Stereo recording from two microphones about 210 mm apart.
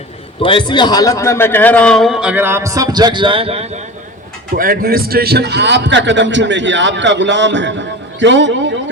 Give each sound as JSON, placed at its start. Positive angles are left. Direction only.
{"t": 0.4, "sound": "a man's voice", "side_deg": 20}
{"t": 4.5, "sound": "a man's voice", "side_deg": -45}